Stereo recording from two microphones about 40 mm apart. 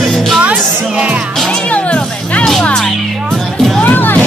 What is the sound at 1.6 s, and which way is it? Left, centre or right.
Music, left.